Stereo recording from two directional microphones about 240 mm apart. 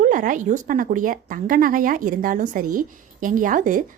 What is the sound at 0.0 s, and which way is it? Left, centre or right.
Speech, right.